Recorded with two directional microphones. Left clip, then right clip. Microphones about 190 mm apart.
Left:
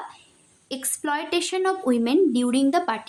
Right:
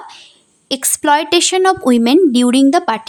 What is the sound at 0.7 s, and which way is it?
A woman's voice, 55° right (ahead or behind).